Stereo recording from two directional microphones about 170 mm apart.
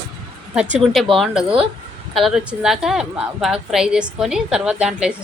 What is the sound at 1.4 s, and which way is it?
Speech, 30° right (ahead or behind).